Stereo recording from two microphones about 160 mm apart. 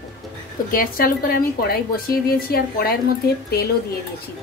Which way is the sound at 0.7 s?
65° left (ahead or behind).